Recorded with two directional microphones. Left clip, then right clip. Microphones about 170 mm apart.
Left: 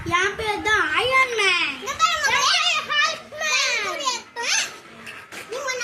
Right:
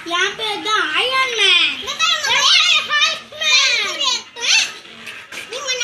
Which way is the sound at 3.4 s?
Centre (ahead or behind).